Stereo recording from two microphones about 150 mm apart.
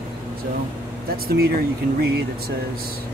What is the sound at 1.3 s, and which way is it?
Speech, 90° right.